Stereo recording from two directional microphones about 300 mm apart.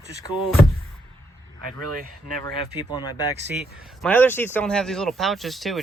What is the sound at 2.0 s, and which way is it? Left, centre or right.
Speech, right.